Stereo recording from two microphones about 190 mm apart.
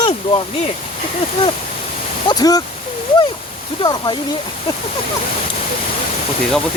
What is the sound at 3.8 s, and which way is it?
Speech, 25° left (ahead or behind).